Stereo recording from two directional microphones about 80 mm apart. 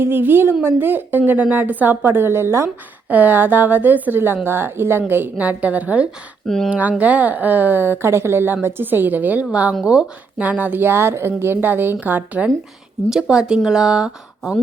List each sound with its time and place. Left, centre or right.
0.0 s a woman's voice: right
3.1 s a woman's voice: right
13.1 s speech: centre